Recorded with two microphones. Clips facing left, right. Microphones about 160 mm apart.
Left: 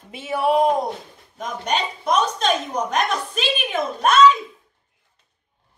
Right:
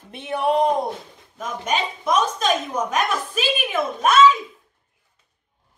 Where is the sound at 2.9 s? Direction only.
5° right (ahead or behind).